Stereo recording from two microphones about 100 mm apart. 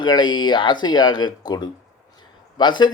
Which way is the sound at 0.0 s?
50° left (ahead or behind).